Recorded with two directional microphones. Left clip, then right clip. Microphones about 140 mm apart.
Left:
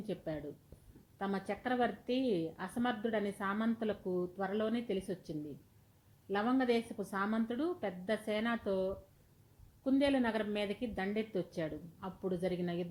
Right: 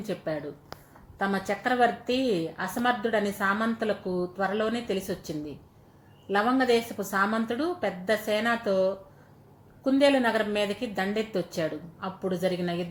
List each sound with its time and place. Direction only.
0.1 s a woman's voice: 25° left (ahead or behind)